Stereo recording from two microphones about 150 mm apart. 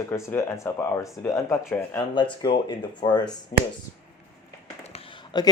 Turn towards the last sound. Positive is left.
turn(degrees=30)  # may be behind; listen again after turning